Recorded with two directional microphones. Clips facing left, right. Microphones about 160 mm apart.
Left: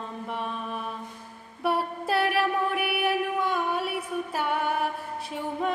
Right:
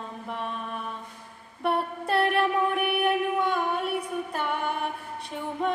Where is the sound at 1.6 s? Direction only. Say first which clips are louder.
Even; 5° left (ahead or behind).